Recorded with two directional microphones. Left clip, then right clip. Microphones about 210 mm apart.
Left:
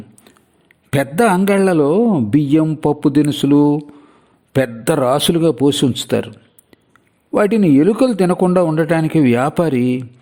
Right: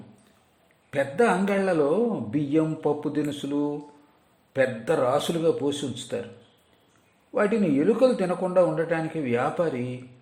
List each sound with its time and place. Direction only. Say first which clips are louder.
0.9 s a man's voice: left 8 dB; 50° left (ahead or behind)
7.3 s a man's voice: left 10 dB; 50° left (ahead or behind)